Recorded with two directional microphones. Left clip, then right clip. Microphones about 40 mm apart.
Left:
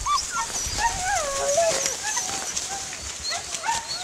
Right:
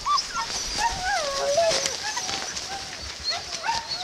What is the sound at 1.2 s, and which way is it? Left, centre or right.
Music, centre.